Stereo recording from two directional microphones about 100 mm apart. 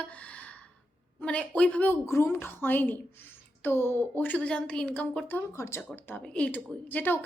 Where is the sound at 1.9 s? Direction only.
25° left (ahead or behind).